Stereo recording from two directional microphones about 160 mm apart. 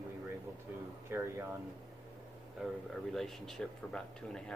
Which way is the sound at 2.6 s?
5° right (ahead or behind).